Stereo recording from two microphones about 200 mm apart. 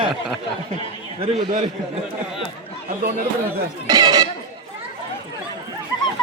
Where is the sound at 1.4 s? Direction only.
30° right (ahead or behind).